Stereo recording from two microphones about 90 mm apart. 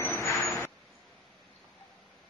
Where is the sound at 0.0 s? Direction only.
30° left (ahead or behind).